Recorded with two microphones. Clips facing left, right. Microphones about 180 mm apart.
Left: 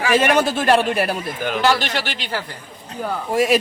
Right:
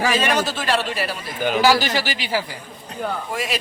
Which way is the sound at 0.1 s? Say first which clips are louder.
Left 4 dB; 55° left (ahead or behind).